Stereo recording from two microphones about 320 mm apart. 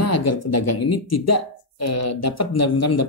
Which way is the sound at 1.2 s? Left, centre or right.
Left.